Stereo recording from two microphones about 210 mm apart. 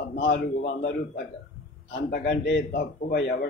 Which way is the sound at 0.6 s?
35° left (ahead or behind).